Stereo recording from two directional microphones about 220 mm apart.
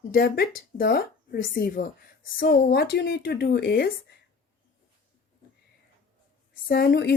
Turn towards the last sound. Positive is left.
turn(degrees=45)  # may be behind; listen again after turning